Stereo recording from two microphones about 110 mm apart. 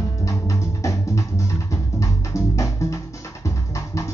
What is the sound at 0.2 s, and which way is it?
Music, 30° left (ahead or behind).